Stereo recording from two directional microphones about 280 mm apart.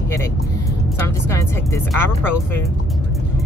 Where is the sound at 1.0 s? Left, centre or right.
Centre.